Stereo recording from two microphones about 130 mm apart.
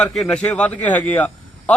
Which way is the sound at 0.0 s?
5° left (ahead or behind).